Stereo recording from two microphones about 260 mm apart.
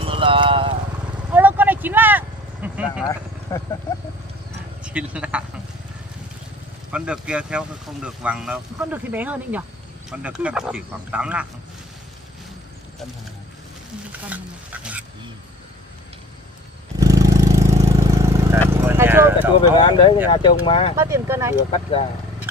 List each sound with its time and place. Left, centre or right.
0.0 s clip-clop: centre
1.3 s vehicle: centre
4.8 s speech: centre
6.9 s speech: centre
14.2 s speech: centre
17.0 s vehicle: centre
18.7 s horse: centre
19.8 s speech: centre
20.9 s speech: centre
21.6 s speech: left